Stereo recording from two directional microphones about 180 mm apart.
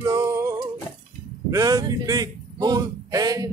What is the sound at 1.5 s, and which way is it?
Male singing, 20° right (ahead or behind).